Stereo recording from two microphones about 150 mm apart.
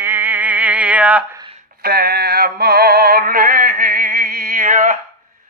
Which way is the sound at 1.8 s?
90° right.